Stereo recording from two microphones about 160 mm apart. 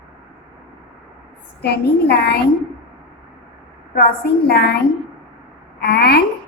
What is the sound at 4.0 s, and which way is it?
Speech, 75° left (ahead or behind).